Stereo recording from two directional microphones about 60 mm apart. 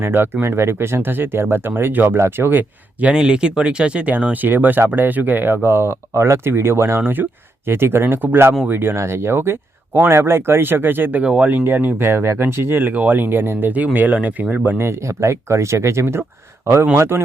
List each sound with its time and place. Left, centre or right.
0.0 s speech: right
3.1 s speech: centre; by 7.0 s right
7.0 s speech: right
11.2 s speech: centre; by 12.9 s right
12.9 s speech: right
14.8 s speech: right